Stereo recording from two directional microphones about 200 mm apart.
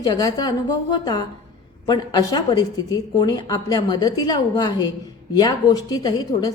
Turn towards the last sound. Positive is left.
turn(degrees=20)  # may be behind; listen again after turning